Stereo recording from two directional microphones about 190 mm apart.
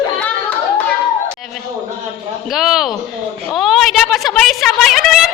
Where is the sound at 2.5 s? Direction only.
Centre (ahead or behind).